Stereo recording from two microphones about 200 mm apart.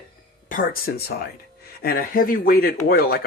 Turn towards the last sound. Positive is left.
turn(degrees=50)  # may be behind; listen again after turning